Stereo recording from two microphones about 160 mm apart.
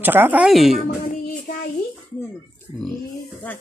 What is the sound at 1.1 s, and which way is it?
Child singing, 55° left (ahead or behind).